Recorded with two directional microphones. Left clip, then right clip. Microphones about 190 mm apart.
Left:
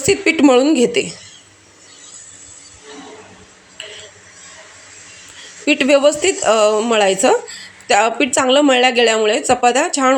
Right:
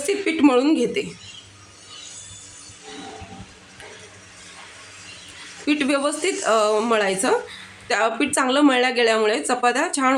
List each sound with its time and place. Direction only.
0.0 s a woman's voice: 30° left (ahead or behind)
5.6 s a woman's voice: 25° left (ahead or behind)